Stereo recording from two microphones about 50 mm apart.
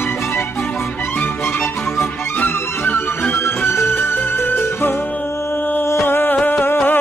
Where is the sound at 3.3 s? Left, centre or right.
Left.